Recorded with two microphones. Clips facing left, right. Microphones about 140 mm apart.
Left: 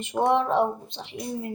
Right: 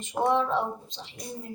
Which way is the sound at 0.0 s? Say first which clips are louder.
Left 3 dB; 65° left (ahead or behind).